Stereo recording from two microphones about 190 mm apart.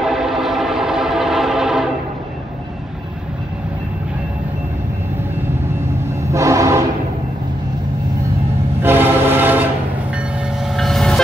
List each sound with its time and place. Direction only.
0.0 s train: centre (ahead or behind)
6.3 s train: 15° right (ahead or behind)
8.8 s train: 10° right (ahead or behind)
10.6 s train: centre (ahead or behind)